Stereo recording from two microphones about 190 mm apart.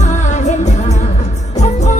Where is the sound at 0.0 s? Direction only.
40° left (ahead or behind).